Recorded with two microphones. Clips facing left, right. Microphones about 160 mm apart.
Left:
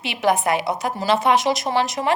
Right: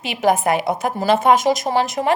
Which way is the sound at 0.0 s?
45° right (ahead or behind).